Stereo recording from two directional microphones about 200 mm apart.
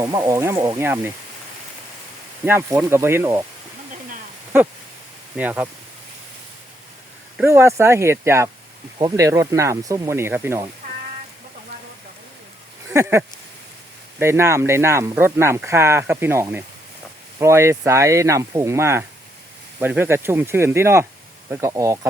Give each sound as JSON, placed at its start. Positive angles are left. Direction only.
{"t": 0.0, "sound": "speech", "side_deg": -15}
{"t": 2.4, "sound": "speech", "side_deg": -10}
{"t": 5.4, "sound": "speech", "side_deg": -10}
{"t": 7.3, "sound": "speech", "side_deg": -10}
{"t": 12.9, "sound": "speech", "side_deg": -15}